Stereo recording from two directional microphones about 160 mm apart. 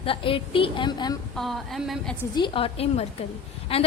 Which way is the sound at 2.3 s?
30° left (ahead or behind).